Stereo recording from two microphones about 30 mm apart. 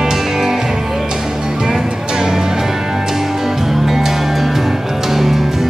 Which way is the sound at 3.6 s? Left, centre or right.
Centre.